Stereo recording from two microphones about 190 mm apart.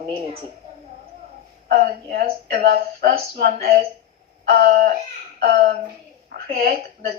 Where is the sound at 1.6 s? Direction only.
45° right (ahead or behind).